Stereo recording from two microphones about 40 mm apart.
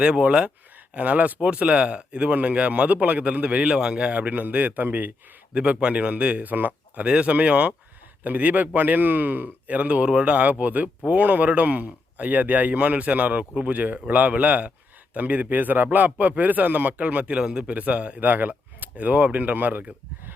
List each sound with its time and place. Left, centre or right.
0.0 s speech: right
0.9 s speech: right
4.0 s a man's voice: right
5.5 s speech: right
6.4 s speech: right
7.0 s speech: right
10.3 s a man's voice: right
17.0 s speech: right
17.3 s speech: right
17.7 s speech: right